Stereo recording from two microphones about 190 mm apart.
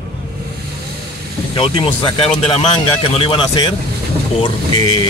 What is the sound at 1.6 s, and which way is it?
Speech, 25° left (ahead or behind).